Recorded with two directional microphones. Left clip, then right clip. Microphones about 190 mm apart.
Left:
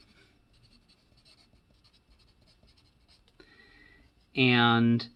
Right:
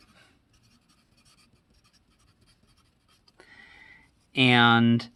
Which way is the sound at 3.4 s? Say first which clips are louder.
Right 6 dB; 40° right (ahead or behind).